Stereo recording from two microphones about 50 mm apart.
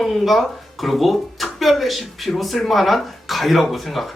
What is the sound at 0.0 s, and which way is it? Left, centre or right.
Speech, centre.